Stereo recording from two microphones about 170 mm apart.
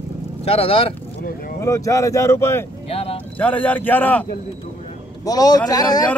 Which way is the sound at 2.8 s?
35° left (ahead or behind).